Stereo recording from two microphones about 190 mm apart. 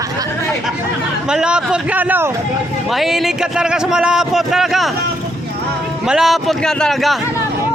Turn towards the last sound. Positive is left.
turn(degrees=0)  # may be behind; listen again after turning